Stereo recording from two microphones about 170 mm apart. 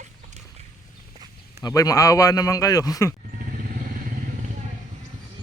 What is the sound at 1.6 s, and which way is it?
Speech, 20° left (ahead or behind).